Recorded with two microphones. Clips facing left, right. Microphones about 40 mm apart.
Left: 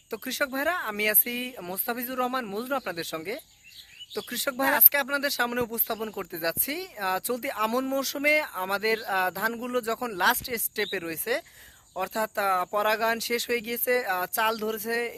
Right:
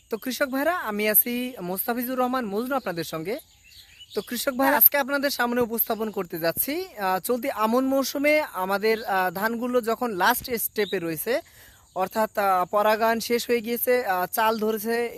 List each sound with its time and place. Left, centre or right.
0.3 s speech: left
4.3 s speech: left
4.5 s speech: centre; by 6.0 s left
6.3 s speech: centre